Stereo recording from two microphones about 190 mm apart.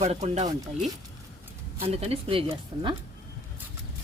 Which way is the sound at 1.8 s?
30° right (ahead or behind).